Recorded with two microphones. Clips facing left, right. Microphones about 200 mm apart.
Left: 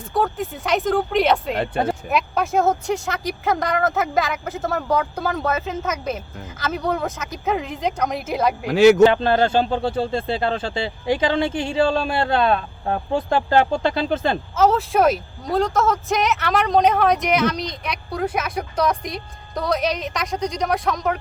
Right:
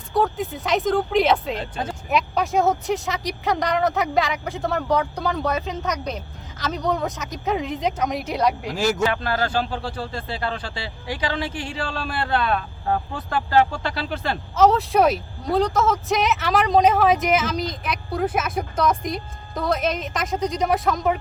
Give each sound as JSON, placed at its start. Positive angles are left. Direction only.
{"t": 0.1, "sound": "a woman's voice", "side_deg": 0}
{"t": 1.5, "sound": "speech", "side_deg": 60}
{"t": 2.0, "sound": "a woman's voice", "side_deg": 0}
{"t": 8.6, "sound": "speech", "side_deg": 65}
{"t": 9.0, "sound": "speech", "side_deg": 25}
{"t": 14.5, "sound": "a woman's voice", "side_deg": 0}